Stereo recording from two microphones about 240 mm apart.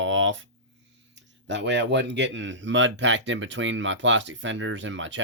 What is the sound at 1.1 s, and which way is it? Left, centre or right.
Speech, right.